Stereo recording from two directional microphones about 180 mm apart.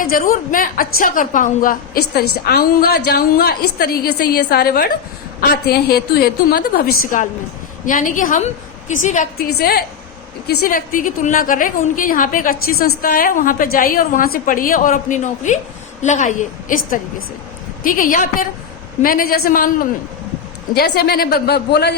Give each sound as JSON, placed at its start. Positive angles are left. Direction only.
{"t": 0.0, "sound": "a woman's voice", "side_deg": 50}
{"t": 9.6, "sound": "a woman's voice", "side_deg": 55}
{"t": 20.7, "sound": "a woman's voice", "side_deg": 60}